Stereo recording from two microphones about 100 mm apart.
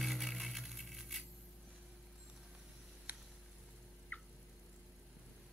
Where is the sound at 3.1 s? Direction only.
15° right (ahead or behind).